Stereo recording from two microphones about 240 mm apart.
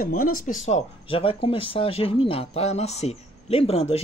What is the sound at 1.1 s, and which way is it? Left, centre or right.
Speech, left.